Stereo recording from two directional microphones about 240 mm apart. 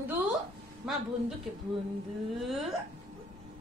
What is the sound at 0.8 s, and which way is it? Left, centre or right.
Speech, centre.